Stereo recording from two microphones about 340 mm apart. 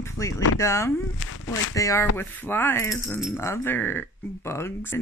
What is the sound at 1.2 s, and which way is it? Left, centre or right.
Speech, left.